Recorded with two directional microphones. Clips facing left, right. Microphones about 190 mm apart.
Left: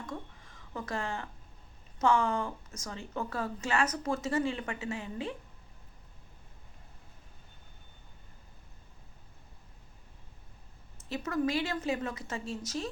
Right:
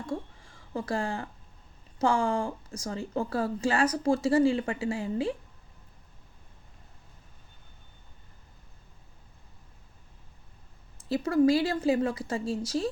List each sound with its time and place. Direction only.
0.0 s a sound: 30° right (ahead or behind)
2.0 s a woman's voice: 30° right (ahead or behind)
11.1 s a woman's voice: 35° right (ahead or behind)